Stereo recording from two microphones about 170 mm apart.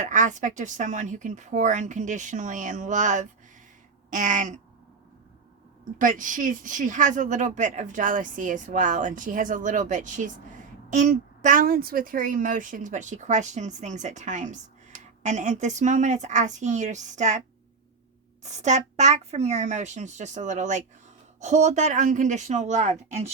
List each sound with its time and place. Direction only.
0.0 s a woman's voice: 45° right (ahead or behind)
6.0 s a woman's voice: 50° right (ahead or behind)
18.4 s a woman's voice: 45° right (ahead or behind)